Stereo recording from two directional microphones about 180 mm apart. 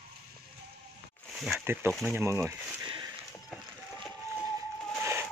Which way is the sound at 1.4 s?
5° right (ahead or behind).